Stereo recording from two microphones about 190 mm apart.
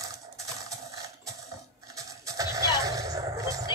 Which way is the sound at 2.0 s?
15° right (ahead or behind).